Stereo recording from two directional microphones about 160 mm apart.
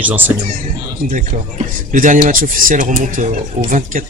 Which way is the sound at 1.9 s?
55° right (ahead or behind).